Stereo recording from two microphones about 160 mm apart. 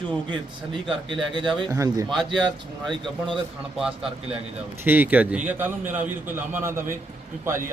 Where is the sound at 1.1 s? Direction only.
30° right (ahead or behind).